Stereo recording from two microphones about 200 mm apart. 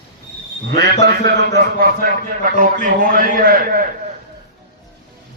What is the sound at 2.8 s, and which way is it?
A man's voice, 45° right (ahead or behind).